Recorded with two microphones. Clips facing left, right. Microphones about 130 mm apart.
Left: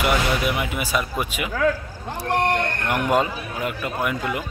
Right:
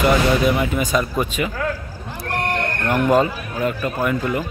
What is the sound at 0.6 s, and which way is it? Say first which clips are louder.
Speech: right 5 dB; 10° left (ahead or behind).